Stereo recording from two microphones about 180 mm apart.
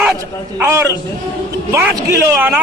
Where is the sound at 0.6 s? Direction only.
15° right (ahead or behind).